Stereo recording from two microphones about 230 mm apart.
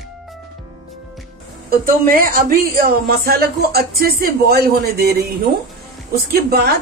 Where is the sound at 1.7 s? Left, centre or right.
Right.